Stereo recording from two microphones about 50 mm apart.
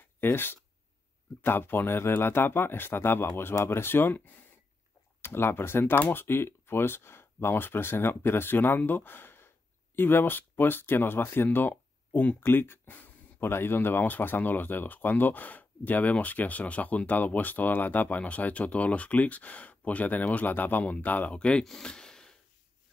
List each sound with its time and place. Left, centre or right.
0.2 s speech: left
5.2 s speech: left
12.4 s speech: left
21.4 s speech: left